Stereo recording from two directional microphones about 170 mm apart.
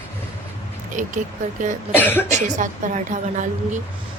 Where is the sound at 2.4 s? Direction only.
45° right (ahead or behind).